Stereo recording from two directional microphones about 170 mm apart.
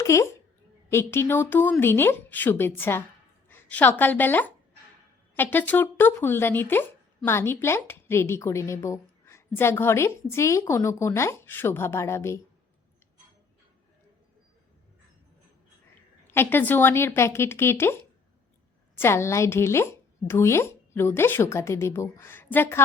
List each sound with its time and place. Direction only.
0.0 s a child's voice: 15° left (ahead or behind)
16.2 s speech: 15° left (ahead or behind)
18.9 s speech: 15° left (ahead or behind)